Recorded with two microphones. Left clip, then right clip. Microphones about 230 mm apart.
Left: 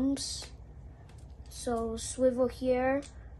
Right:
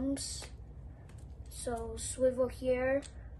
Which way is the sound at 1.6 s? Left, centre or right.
Left.